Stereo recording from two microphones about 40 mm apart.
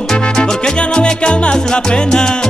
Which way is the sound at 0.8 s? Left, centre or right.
Left.